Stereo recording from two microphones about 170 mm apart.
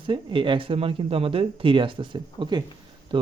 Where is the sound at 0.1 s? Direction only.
30° right (ahead or behind).